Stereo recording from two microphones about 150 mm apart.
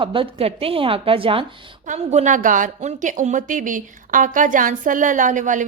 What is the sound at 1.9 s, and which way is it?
A woman's voice, 50° right (ahead or behind).